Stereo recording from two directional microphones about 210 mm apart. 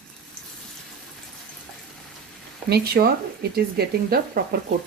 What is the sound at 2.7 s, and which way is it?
Speech, 50° right (ahead or behind).